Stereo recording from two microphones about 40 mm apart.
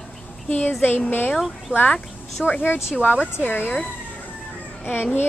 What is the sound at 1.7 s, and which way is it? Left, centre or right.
Speech, right.